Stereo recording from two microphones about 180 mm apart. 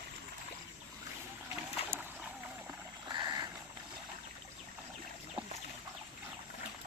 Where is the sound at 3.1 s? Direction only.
20° right (ahead or behind).